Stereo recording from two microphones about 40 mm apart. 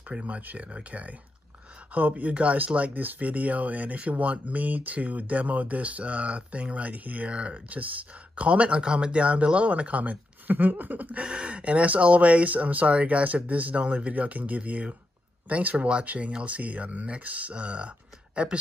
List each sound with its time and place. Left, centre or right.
0.1 s speech: right
11.2 s speech: right